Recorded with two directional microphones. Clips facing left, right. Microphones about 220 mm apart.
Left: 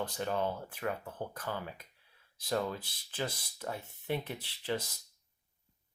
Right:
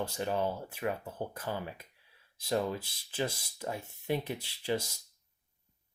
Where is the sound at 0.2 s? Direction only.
10° right (ahead or behind).